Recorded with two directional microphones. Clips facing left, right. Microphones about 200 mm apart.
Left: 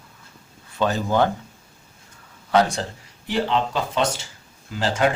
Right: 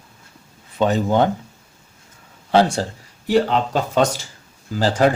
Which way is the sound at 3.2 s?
40° right (ahead or behind).